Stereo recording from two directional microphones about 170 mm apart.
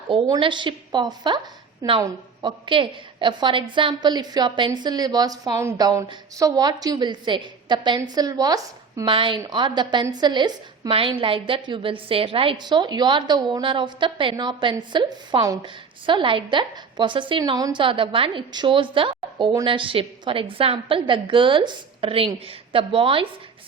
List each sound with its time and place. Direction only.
0.1 s a woman's voice: 30° right (ahead or behind)